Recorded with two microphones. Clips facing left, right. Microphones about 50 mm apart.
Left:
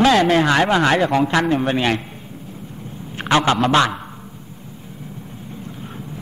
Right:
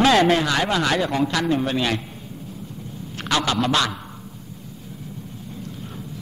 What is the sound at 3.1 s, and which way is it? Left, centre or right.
Speech, left.